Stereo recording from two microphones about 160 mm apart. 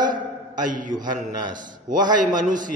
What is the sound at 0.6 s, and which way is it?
A man's voice, 55° right (ahead or behind).